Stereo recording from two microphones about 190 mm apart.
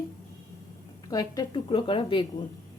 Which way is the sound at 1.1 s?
20° left (ahead or behind).